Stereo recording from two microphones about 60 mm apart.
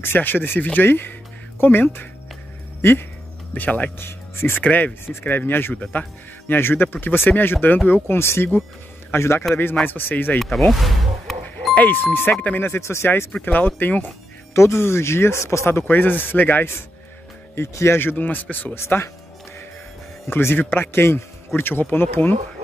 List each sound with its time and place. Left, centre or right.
0.0 s speech: left
3.5 s speech: left
4.0 s speech: left
4.6 s speech: left
9.8 s speech: left
10.7 s music: centre
11.7 s speech: left
13.5 s speech: left
14.5 s speech: left
15.9 s speech: left
17.6 s speech: left
18.0 s speech: left
18.8 s speech: left
20.2 s speech: left